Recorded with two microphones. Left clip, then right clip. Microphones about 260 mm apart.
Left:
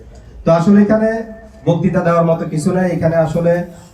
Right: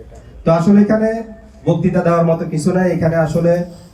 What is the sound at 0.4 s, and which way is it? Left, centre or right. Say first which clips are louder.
Speech: left 1 dB; centre.